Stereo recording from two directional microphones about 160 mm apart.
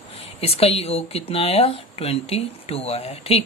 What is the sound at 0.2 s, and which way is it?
A woman's voice, 40° left (ahead or behind).